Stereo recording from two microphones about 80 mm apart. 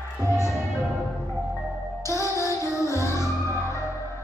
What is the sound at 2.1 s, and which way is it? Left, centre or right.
Music, left.